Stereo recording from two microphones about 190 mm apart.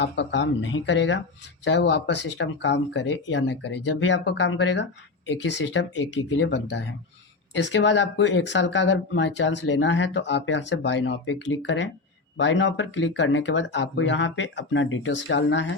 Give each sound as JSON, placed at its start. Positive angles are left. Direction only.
{"t": 0.0, "sound": "speech", "side_deg": 70}